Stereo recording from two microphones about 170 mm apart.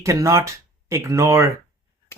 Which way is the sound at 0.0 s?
20° right (ahead or behind).